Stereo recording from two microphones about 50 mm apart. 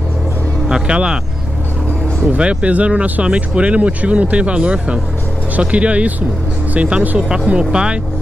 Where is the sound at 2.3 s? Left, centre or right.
Right.